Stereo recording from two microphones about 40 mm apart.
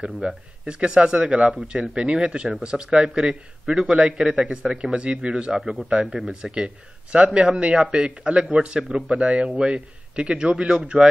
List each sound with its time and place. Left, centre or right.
0.0 s speech: right
4.4 s speech: centre